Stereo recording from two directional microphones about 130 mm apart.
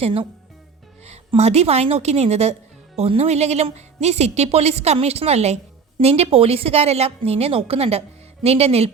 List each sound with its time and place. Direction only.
0.0 s a woman's voice: 45° right (ahead or behind)